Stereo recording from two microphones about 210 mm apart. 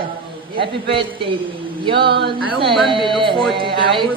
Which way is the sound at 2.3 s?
25° right (ahead or behind).